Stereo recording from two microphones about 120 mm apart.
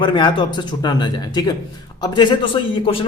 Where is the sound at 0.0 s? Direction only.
40° left (ahead or behind).